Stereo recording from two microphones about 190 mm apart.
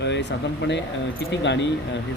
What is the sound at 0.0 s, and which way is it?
Speech, 65° left (ahead or behind).